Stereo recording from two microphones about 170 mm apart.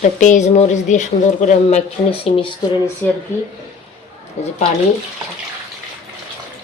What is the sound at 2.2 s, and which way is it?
Speech, 30° left (ahead or behind).